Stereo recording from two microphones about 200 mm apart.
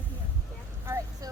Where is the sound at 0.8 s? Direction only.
15° right (ahead or behind).